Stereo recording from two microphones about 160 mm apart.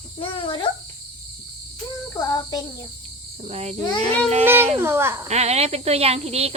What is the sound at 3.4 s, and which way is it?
Cricket, 40° right (ahead or behind).